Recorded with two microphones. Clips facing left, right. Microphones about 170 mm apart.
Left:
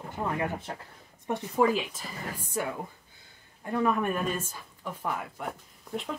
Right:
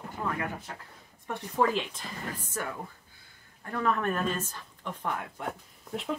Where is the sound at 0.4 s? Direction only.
25° left (ahead or behind).